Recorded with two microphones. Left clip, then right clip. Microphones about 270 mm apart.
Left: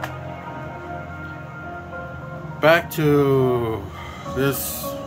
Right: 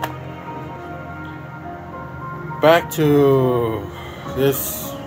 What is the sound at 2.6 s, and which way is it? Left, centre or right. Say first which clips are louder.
Speech: right 2 dB; centre.